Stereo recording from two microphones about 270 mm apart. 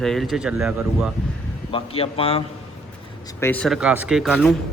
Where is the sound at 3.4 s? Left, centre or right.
Centre.